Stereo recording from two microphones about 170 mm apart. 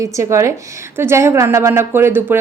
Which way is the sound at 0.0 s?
15° right (ahead or behind).